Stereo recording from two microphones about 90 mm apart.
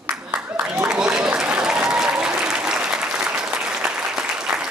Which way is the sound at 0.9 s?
10° right (ahead or behind).